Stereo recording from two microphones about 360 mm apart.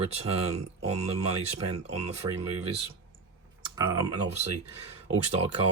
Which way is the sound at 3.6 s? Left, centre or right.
Centre.